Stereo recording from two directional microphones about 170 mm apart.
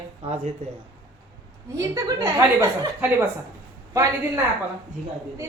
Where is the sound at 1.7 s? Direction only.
20° right (ahead or behind).